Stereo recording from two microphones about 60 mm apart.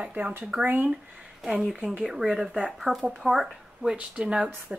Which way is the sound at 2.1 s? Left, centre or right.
Centre.